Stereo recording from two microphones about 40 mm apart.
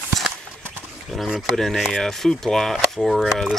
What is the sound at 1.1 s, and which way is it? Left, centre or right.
Speech, centre.